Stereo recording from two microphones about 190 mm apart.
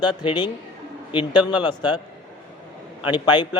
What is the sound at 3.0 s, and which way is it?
Speech, 25° left (ahead or behind).